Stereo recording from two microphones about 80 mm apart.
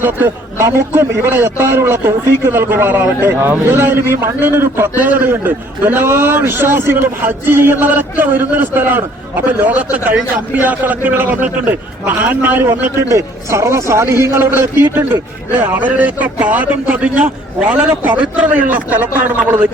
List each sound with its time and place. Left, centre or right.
0.0 s a man's voice: right
13.1 s a man's voice: right